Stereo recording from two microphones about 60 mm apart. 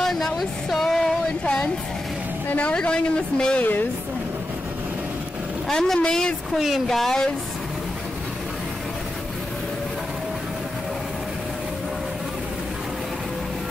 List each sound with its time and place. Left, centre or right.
0.0 s a sound: centre
2.5 s speech: centre
5.7 s speech: centre